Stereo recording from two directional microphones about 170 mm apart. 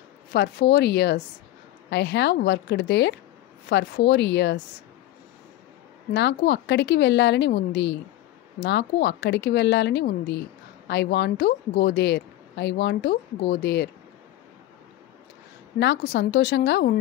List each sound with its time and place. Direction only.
0.3 s speech: 70° left (ahead or behind); by 3.2 s 90° left
3.6 s speech: 80° left
6.1 s speech: 90° left; by 13.8 s 75° left (ahead or behind)
15.8 s speech: 80° left